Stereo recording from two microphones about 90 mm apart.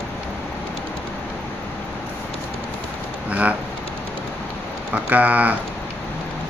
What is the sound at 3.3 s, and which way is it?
Vehicle, 15° right (ahead or behind).